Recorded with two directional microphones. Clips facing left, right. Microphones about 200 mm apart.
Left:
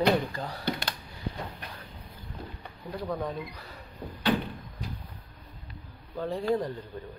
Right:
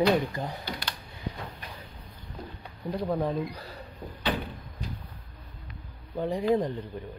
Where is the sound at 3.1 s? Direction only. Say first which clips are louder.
Right 5 dB; 30° right (ahead or behind).